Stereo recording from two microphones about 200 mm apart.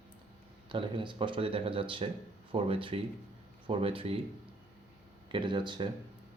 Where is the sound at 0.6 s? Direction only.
25° right (ahead or behind).